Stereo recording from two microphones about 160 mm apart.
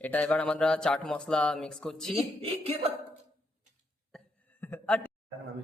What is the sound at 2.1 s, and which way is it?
Speech, 40° right (ahead or behind).